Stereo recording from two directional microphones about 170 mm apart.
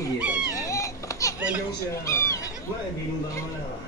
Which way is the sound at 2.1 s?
20° left (ahead or behind).